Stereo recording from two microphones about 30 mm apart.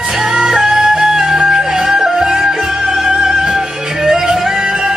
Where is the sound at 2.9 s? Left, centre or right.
Right.